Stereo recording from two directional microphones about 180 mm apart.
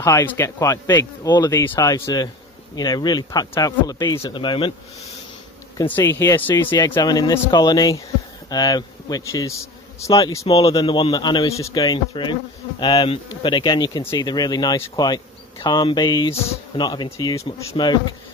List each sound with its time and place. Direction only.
0.0 s speech: 15° left (ahead or behind)
5.9 s speech: 10° left (ahead or behind)
10.4 s speech: 35° left (ahead or behind)